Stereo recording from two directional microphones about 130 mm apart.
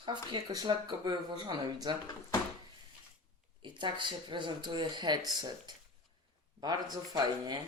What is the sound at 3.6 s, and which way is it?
Speech, 35° right (ahead or behind).